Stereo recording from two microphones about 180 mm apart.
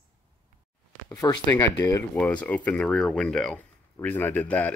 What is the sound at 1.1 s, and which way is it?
Speech, 20° left (ahead or behind).